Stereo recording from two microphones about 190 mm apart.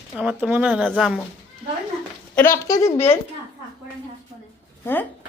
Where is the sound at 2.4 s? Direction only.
15° left (ahead or behind).